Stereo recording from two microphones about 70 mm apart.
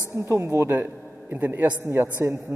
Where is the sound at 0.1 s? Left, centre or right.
Right.